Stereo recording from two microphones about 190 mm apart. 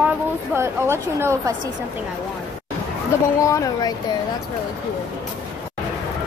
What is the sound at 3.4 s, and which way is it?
Speech, 20° left (ahead or behind).